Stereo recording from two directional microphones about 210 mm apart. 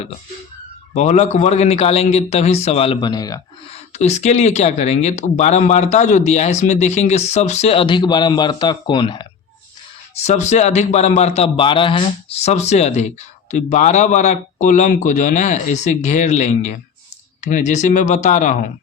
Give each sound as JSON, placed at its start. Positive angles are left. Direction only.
{"t": 0.9, "sound": "a man's voice", "side_deg": 35}
{"t": 3.8, "sound": "a man's voice", "side_deg": 30}
{"t": 10.2, "sound": "a man's voice", "side_deg": 35}